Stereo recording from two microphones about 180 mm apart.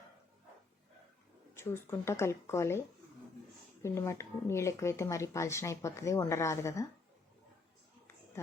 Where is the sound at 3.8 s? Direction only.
15° left (ahead or behind).